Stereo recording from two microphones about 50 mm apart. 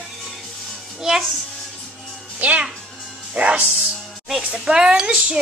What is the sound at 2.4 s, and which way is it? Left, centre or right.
A child's voice, right.